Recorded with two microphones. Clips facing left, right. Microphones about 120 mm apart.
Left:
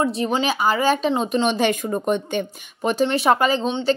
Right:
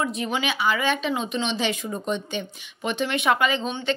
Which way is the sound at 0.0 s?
35° left (ahead or behind).